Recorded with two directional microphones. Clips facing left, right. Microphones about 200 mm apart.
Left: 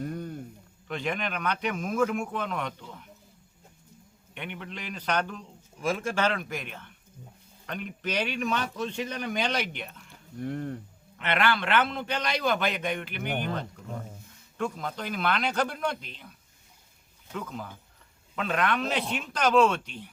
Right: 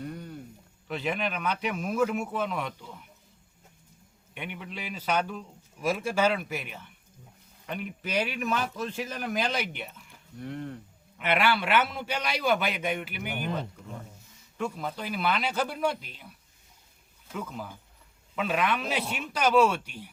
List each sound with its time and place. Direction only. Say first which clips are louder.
0.0 s a sound: left 4 dB; 45° left (ahead or behind)
0.9 s speech: right 1 dB; 5° right (ahead or behind)
4.4 s a man's voice: even; 10° right (ahead or behind)
10.4 s speech: left 4 dB; 45° left (ahead or behind)
11.2 s a man's voice: right 1 dB; 10° right (ahead or behind)
17.3 s a man's voice: even; 5° right (ahead or behind)